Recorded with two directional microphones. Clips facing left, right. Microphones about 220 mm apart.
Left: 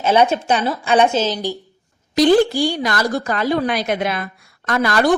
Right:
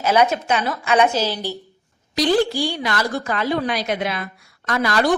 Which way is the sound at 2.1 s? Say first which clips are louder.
Left 5 dB; 50° left (ahead or behind).